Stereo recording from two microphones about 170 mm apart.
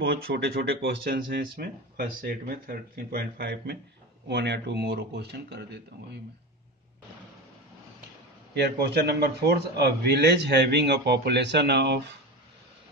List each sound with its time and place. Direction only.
0.0 s speech: 90° right
1.4 s speech: 60° right (ahead or behind)
4.3 s speech: 80° right
8.6 s speech: 75° right (ahead or behind)